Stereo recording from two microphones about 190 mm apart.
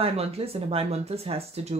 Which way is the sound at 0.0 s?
30° right (ahead or behind).